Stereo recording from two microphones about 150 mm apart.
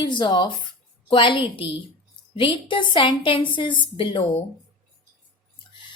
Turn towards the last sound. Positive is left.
turn(degrees=35)  # may be behind; listen again after turning